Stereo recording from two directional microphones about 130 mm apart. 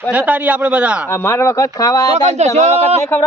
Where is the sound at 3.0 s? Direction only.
20° left (ahead or behind).